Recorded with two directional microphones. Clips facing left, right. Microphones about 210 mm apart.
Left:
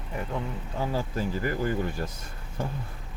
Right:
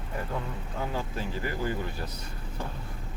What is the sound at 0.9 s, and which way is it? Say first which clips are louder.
Speech: left 4 dB; 45° left (ahead or behind).